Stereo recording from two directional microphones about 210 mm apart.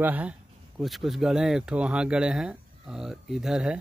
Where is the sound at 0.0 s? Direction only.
5° right (ahead or behind).